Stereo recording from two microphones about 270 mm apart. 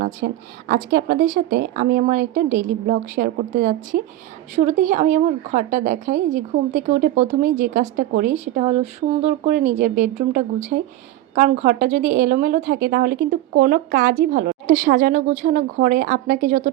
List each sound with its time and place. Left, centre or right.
0.2 s a woman's voice: right